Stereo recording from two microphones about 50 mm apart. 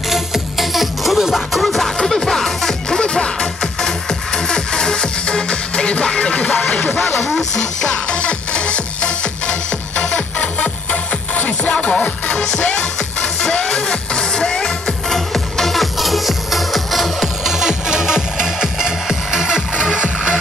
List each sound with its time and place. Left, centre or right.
0.1 s music: centre; by 6.6 s left
7.8 s music: centre